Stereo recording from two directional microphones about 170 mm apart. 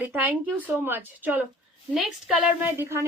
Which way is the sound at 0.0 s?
10° right (ahead or behind).